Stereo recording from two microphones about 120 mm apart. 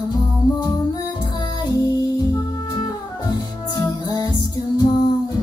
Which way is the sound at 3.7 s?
35° left (ahead or behind).